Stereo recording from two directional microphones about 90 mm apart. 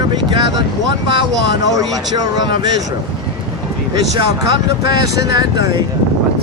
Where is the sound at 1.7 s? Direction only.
50° right (ahead or behind).